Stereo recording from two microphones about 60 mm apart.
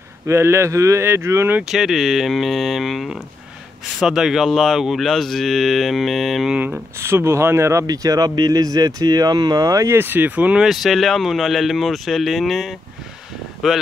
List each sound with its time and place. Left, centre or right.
0.3 s speech: right
1.6 s speech: centre
7.0 s speech: right
7.8 s speech: right
9.8 s speech: right
10.6 s speech: centre